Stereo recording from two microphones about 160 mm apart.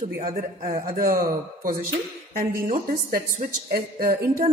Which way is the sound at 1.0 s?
65° right (ahead or behind).